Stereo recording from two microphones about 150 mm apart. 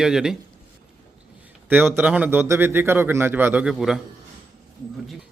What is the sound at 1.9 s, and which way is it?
Speech, 10° right (ahead or behind).